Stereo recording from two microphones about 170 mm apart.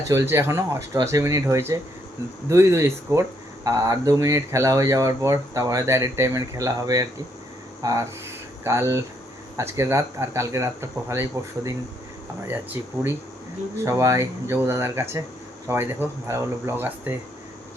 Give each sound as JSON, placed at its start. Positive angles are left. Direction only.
{"t": 0.1, "sound": "speech", "side_deg": -15}
{"t": 13.8, "sound": "speech", "side_deg": -15}